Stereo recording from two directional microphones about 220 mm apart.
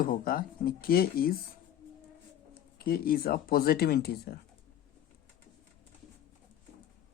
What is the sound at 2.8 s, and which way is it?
Speech, 45° left (ahead or behind).